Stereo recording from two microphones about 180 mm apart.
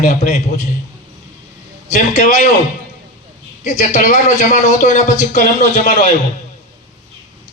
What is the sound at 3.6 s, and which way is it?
A man's voice, 40° left (ahead or behind).